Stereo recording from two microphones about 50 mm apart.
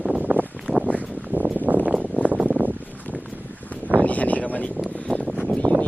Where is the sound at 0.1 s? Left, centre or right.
Right.